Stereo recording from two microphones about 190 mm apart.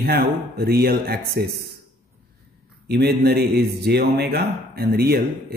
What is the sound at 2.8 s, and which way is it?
Speech, 55° right (ahead or behind).